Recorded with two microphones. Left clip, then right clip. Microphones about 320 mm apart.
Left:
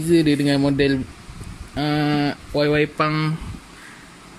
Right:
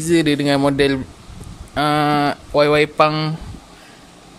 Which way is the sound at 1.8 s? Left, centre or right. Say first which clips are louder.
Right 5 dB; centre.